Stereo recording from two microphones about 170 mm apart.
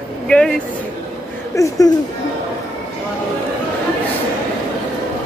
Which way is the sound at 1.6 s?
20° left (ahead or behind).